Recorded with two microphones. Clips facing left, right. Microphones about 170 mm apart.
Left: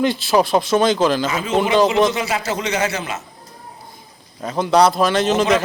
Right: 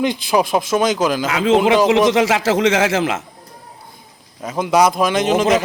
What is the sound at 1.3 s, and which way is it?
A man's voice, 90° right.